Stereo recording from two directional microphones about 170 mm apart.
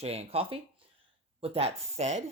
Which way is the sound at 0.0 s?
35° right (ahead or behind).